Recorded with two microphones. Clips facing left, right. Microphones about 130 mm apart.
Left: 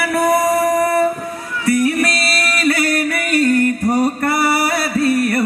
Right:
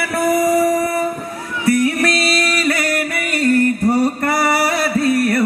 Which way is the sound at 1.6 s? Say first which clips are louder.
Even; 25° right (ahead or behind).